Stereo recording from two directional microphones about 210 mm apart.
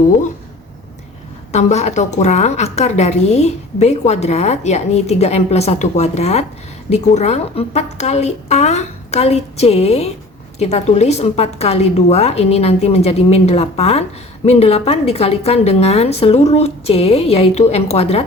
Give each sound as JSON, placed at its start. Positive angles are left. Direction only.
{"t": 1.5, "sound": "a woman's voice", "side_deg": 30}